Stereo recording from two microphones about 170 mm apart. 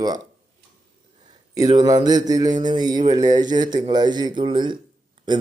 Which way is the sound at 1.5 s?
25° right (ahead or behind).